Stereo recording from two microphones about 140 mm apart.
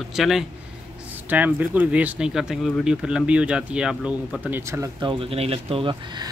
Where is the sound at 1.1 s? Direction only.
15° right (ahead or behind).